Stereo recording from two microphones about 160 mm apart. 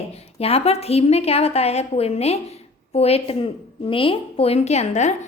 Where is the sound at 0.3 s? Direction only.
40° left (ahead or behind).